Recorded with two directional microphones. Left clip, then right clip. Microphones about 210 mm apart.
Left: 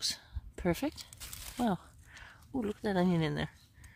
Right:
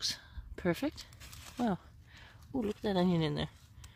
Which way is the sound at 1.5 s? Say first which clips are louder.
Left 1 dB; 10° left (ahead or behind).